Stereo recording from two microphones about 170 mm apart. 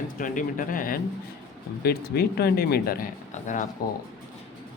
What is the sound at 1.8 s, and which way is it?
Speech, 65° left (ahead or behind).